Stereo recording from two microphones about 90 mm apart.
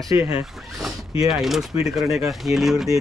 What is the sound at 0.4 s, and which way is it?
Speech, 5° right (ahead or behind).